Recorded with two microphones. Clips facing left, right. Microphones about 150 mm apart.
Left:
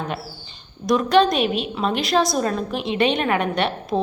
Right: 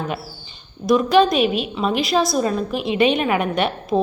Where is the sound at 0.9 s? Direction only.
5° right (ahead or behind).